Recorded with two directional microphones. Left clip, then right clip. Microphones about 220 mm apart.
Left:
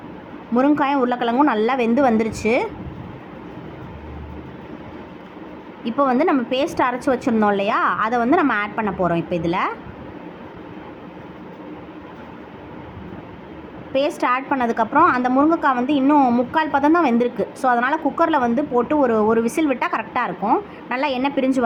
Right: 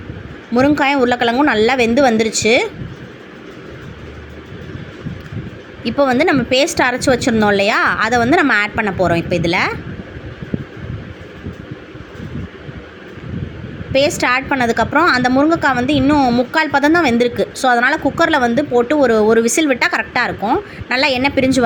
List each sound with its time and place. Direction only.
0.5 s a woman's voice: 15° right (ahead or behind)
6.1 s a woman's voice: 15° right (ahead or behind)
13.9 s a woman's voice: 15° right (ahead or behind)